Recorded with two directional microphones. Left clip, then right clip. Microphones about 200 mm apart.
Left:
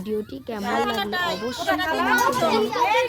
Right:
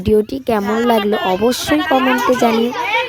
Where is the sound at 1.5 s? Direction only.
40° right (ahead or behind).